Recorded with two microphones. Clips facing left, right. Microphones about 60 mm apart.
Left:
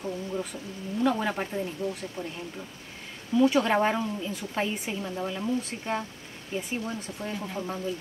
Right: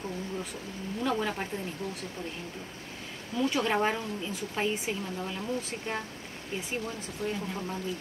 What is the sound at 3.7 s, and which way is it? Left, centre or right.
Speech, left.